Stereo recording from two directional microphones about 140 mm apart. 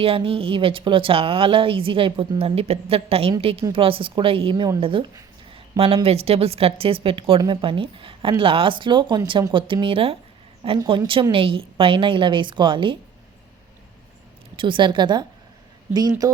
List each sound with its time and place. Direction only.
0.0 s speech: 40° right (ahead or behind)
14.5 s speech: 35° right (ahead or behind)